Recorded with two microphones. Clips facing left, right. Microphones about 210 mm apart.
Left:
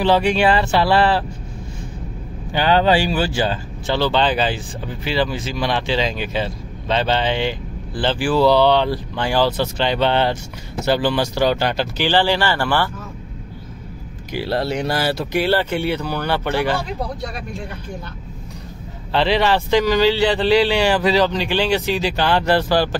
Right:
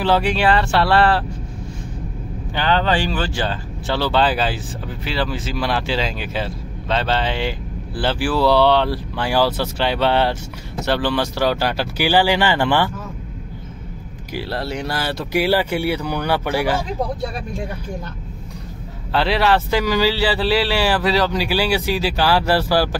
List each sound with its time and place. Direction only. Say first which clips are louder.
0.0 s speech: left 2 dB; centre (ahead or behind)
2.5 s speech: left 4 dB; 10° left (ahead or behind); by 12.9 s 15° right (ahead or behind)
14.8 s speech: left 4 dB; 15° left (ahead or behind)
15.3 s speech: right 2 dB; 10° right (ahead or behind)
19.1 s speech: even; centre (ahead or behind)